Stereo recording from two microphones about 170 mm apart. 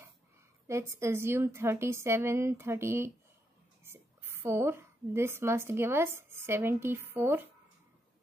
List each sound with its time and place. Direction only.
0.7 s a woman's voice: 15° right (ahead or behind)